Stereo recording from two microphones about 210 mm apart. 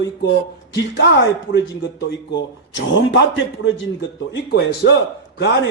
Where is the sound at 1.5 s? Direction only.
55° left (ahead or behind).